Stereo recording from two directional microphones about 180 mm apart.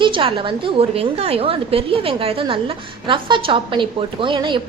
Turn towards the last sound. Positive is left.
turn(degrees=-25)  # may be behind; listen again after turning